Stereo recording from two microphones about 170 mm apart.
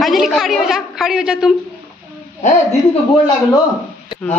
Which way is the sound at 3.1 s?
25° left (ahead or behind).